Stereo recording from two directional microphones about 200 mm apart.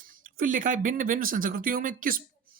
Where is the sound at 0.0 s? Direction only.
45° right (ahead or behind).